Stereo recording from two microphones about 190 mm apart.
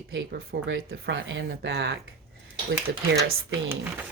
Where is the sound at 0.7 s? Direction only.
80° right.